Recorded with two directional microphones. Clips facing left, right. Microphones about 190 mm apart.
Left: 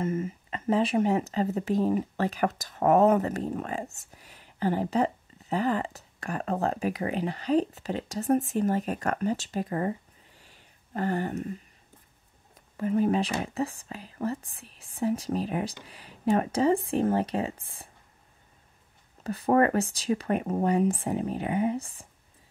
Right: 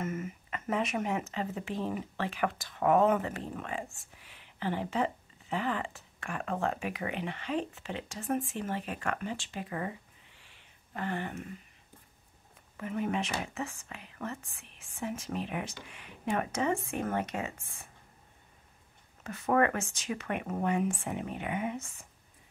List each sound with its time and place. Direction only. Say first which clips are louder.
0.0 s speech: left 6 dB; 30° left (ahead or behind)
12.7 s speech: left 8 dB; 35° left (ahead or behind)
19.2 s speech: left 5 dB; 35° left (ahead or behind)